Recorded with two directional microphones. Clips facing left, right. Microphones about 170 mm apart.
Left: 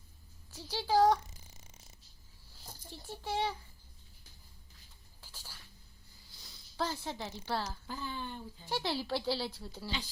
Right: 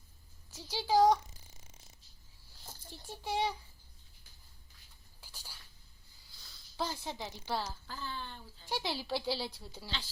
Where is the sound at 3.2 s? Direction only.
15° right (ahead or behind).